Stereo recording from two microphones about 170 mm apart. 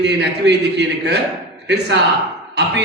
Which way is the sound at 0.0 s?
90° right.